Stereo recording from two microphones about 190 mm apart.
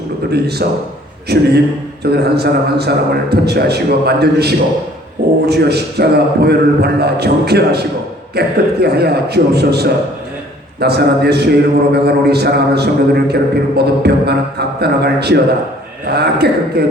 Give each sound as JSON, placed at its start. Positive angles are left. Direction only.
{"t": 0.6, "sound": "a man's voice", "side_deg": -55}